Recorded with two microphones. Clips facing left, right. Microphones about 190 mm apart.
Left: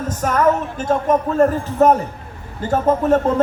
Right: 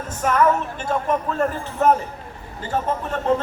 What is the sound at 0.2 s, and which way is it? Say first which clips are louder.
A man's voice: left 2 dB; 40° left (ahead or behind).